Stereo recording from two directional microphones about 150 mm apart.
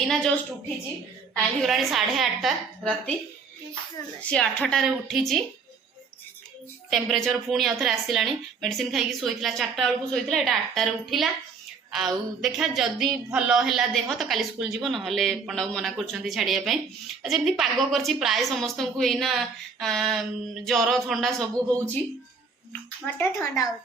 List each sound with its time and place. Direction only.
0.1 s a woman's voice: 5° left (ahead or behind)
1.6 s a woman's voice: centre (ahead or behind)
4.3 s a woman's voice: 5° left (ahead or behind)
6.9 s a woman's voice: centre (ahead or behind)
23.0 s speech: 15° left (ahead or behind)